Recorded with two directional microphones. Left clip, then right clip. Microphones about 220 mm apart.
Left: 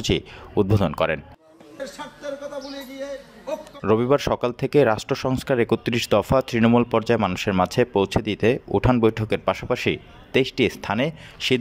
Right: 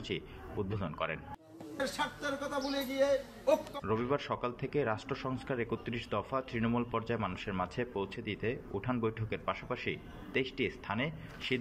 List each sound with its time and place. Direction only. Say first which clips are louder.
0.0 s speech: left 15 dB; 50° left (ahead or behind)
1.8 s a man's voice: left 1 dB; centre (ahead or behind)
3.8 s speech: left 14 dB; 50° left (ahead or behind)